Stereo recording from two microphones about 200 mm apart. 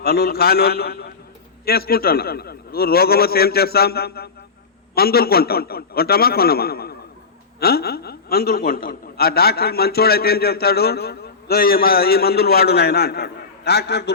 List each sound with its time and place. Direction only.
0.0 s a man's voice: 50° left (ahead or behind)